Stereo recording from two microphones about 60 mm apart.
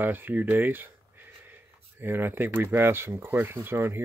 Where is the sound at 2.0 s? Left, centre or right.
Right.